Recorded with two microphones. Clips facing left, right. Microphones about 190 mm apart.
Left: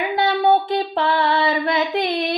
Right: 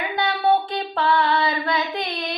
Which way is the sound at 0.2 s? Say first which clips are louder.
Left 3 dB; 25° left (ahead or behind).